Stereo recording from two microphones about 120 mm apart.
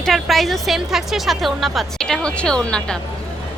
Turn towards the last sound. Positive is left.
turn(degrees=5)  # may be behind; listen again after turning